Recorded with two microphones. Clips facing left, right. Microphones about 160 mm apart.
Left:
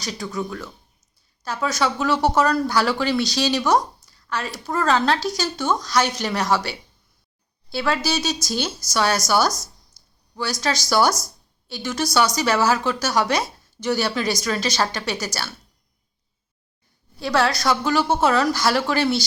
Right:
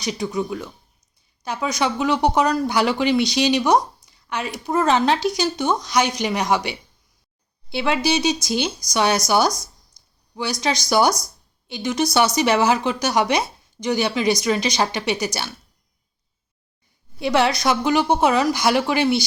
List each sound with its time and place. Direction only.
0.0 s speech: 20° right (ahead or behind)
10.6 s speech: 20° right (ahead or behind)
17.2 s speech: 20° right (ahead or behind)